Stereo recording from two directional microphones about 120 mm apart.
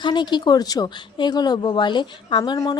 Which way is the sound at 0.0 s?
40° left (ahead or behind).